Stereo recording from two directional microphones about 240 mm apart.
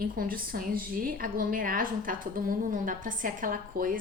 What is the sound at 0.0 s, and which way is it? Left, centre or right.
A woman's voice, right.